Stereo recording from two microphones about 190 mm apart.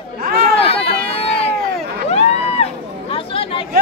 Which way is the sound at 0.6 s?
30° left (ahead or behind).